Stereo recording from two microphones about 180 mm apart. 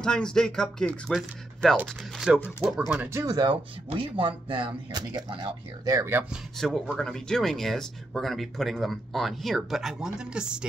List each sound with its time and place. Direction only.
0.0 s speech: 5° left (ahead or behind); by 6.2 s 15° right (ahead or behind)
6.6 s speech: 5° left (ahead or behind)